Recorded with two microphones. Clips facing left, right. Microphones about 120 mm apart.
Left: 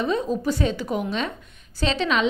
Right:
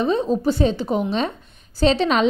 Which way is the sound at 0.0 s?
30° right (ahead or behind).